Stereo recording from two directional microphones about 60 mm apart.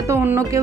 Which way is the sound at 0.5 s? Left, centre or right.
Right.